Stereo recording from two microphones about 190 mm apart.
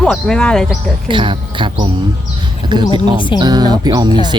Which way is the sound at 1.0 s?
25° right (ahead or behind).